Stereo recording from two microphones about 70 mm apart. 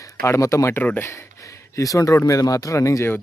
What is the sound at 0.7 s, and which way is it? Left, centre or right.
Speech, left.